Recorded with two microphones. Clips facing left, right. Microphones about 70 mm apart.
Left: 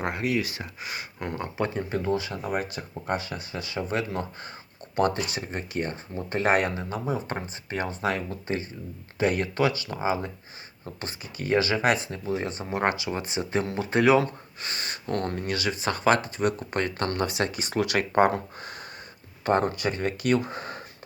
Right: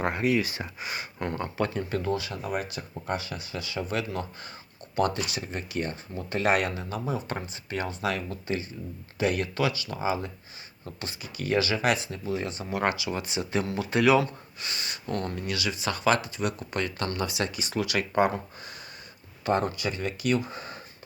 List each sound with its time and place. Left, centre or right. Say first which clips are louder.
0.0 s speech: right 2 dB; centre; by 20.8 s left